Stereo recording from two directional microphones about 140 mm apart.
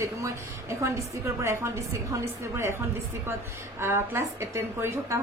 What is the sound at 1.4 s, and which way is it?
A woman's voice, 20° right (ahead or behind).